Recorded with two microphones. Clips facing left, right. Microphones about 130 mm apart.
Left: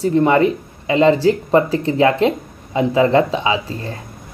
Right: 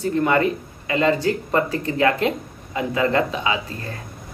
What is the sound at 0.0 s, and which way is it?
Speech, 30° left (ahead or behind).